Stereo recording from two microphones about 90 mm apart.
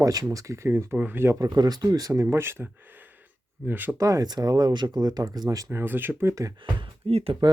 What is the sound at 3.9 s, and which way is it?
Speech, 40° right (ahead or behind).